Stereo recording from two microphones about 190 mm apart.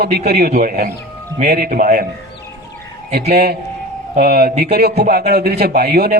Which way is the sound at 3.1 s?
55° right (ahead or behind).